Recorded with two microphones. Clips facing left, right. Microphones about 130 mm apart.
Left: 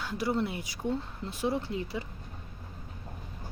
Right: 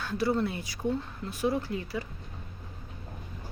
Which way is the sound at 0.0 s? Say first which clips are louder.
Right 2 dB; 15° left (ahead or behind).